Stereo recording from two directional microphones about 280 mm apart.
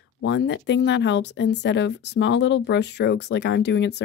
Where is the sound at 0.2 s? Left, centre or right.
Left.